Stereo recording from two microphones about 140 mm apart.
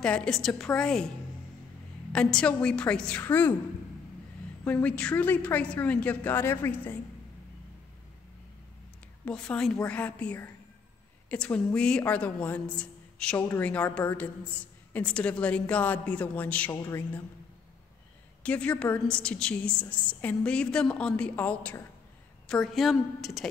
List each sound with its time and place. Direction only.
0.0 s a woman's voice: 5° left (ahead or behind)
2.1 s a woman's voice: 5° left (ahead or behind)
4.6 s a woman's voice: 10° left (ahead or behind)
9.2 s a woman's voice: 5° left (ahead or behind)
18.4 s a woman's voice: 10° left (ahead or behind)